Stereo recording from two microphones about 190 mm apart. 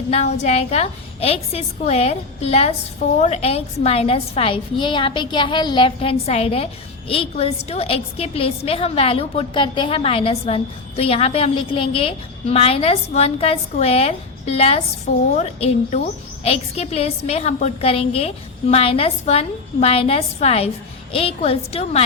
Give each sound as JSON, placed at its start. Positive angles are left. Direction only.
{"t": 0.1, "sound": "a woman's voice", "side_deg": 35}